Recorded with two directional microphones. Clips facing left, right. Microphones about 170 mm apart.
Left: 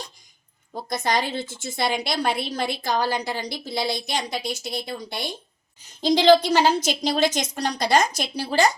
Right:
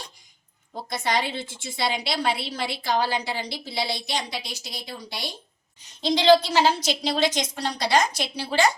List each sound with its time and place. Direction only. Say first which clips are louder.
0.9 s a woman's voice: left 2 dB; 45° left (ahead or behind)